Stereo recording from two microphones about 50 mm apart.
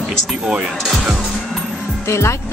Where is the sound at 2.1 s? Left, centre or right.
Left.